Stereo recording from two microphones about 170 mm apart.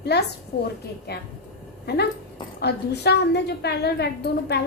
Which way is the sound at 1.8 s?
70° left (ahead or behind).